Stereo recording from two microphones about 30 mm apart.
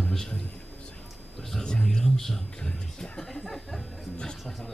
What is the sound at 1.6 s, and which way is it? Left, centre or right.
Speech, left.